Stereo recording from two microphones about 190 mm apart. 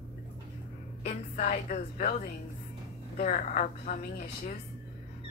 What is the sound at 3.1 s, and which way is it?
A woman's voice, 40° left (ahead or behind).